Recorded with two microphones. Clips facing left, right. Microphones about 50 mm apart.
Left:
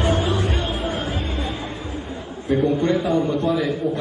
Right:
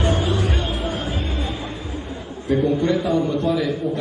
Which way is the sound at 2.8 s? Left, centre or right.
Left.